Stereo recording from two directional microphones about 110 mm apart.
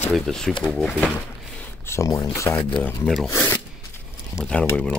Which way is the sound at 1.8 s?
25° left (ahead or behind).